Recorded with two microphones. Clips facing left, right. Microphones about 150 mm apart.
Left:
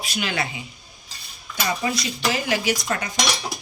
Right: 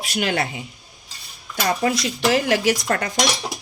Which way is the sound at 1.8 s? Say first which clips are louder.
Right 4 dB; 55° right (ahead or behind).